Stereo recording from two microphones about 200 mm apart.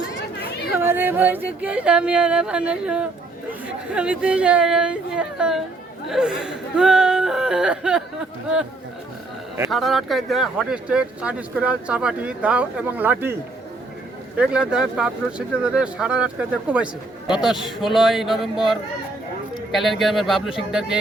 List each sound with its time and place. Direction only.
0.8 s speech: 10° right (ahead or behind)
9.6 s speech: centre (ahead or behind)
14.3 s speech: 5° right (ahead or behind)